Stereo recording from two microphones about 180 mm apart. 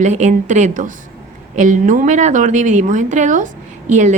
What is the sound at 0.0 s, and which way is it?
A woman's voice, 40° right (ahead or behind).